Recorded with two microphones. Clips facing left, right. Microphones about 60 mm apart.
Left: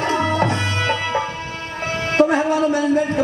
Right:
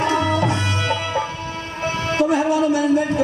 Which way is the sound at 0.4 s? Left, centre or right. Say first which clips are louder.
Left 1 dB; left.